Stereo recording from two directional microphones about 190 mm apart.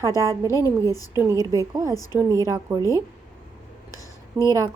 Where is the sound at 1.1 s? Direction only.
15° right (ahead or behind).